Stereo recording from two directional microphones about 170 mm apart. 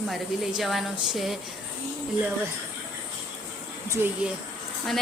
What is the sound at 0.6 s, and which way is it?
Speech, centre (ahead or behind).